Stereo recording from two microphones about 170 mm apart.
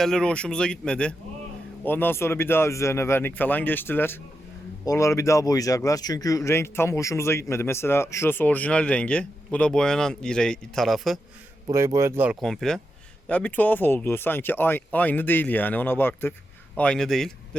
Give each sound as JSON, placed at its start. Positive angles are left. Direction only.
{"t": 0.0, "sound": "speech", "side_deg": 5}
{"t": 11.7, "sound": "a man's voice", "side_deg": -20}
{"t": 12.4, "sound": "speech", "side_deg": 0}